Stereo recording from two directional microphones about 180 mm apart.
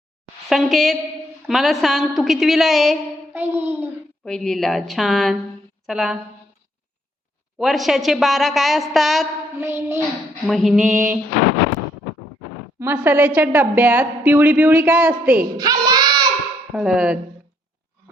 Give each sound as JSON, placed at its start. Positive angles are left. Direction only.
{"t": 0.4, "sound": "a woman's voice", "side_deg": 0}
{"t": 3.3, "sound": "a woman's voice", "side_deg": -10}
{"t": 4.3, "sound": "a woman's voice", "side_deg": 0}
{"t": 7.6, "sound": "a woman's voice", "side_deg": 0}
{"t": 9.6, "sound": "a woman's voice", "side_deg": -15}
{"t": 10.4, "sound": "a woman's voice", "side_deg": 0}
{"t": 10.9, "sound": "a woman's voice", "side_deg": -15}
{"t": 12.8, "sound": "a woman's voice", "side_deg": -10}
{"t": 15.4, "sound": "child singing", "side_deg": -20}
{"t": 16.7, "sound": "a woman's voice", "side_deg": -5}